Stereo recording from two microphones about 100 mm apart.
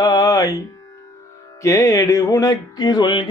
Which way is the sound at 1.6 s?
35° left (ahead or behind).